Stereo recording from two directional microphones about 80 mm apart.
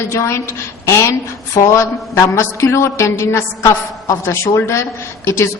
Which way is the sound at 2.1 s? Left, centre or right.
Left.